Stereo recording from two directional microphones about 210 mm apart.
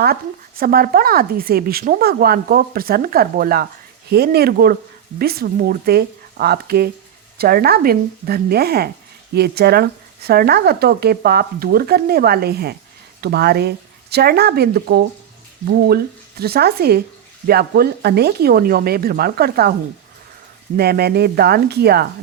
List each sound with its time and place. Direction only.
0.0 s speech: 45° right (ahead or behind)
16.4 s speech: 50° right (ahead or behind)
20.7 s speech: 50° right (ahead or behind)